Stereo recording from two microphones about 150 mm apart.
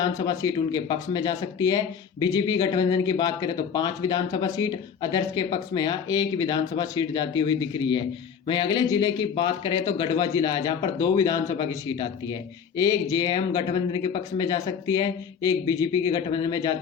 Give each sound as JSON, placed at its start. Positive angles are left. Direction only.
{"t": 0.0, "sound": "a man's voice", "side_deg": 25}